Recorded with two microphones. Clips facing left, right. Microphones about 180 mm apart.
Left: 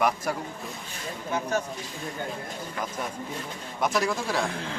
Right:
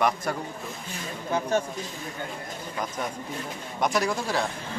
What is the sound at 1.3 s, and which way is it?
Speech, 30° right (ahead or behind).